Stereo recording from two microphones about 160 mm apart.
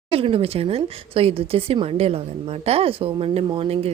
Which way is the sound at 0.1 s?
35° right (ahead or behind).